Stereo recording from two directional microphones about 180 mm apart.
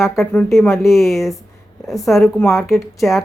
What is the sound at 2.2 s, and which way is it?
Speech, 15° left (ahead or behind).